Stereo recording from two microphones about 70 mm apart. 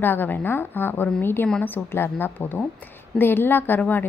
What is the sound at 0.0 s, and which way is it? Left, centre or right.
A woman's voice, left.